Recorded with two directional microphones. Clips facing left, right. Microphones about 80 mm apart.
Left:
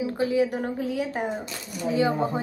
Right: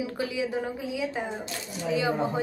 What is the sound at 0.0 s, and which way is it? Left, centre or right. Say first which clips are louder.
Speech: left 6 dB; left.